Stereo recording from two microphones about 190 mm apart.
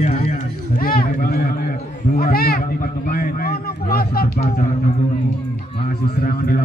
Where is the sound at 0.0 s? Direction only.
40° left (ahead or behind).